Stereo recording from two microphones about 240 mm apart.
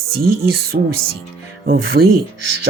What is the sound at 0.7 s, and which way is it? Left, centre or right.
Speech, right.